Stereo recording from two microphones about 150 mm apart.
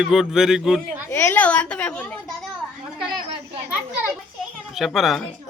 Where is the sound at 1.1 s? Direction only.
15° left (ahead or behind).